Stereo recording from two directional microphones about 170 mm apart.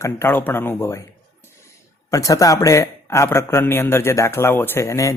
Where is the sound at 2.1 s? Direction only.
20° left (ahead or behind).